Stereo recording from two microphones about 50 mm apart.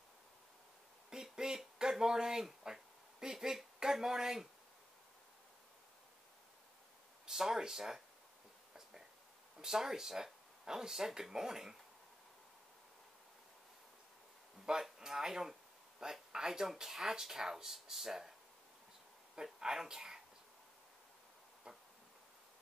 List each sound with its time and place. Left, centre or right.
1.1 s speech: centre
7.2 s speech: centre
9.6 s speech: centre
14.7 s speech: centre
19.3 s speech: centre
21.7 s a sound: centre